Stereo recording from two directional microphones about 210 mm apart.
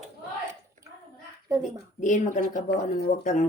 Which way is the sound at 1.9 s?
35° left (ahead or behind).